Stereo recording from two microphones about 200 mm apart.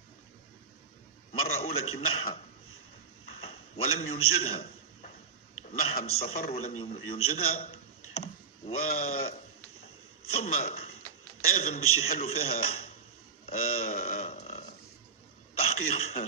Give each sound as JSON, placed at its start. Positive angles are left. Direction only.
{"t": 1.5, "sound": "speech", "side_deg": 30}
{"t": 3.3, "sound": "a sound", "side_deg": 30}
{"t": 5.7, "sound": "a man's voice", "side_deg": 35}
{"t": 6.5, "sound": "speech", "side_deg": 30}
{"t": 8.1, "sound": "clicking", "side_deg": 30}
{"t": 8.7, "sound": "a man's voice", "side_deg": 45}
{"t": 10.5, "sound": "speech", "side_deg": 30}
{"t": 13.9, "sound": "burping", "side_deg": 40}
{"t": 15.5, "sound": "speech", "side_deg": 30}